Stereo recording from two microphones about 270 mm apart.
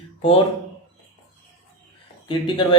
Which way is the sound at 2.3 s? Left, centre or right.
Centre.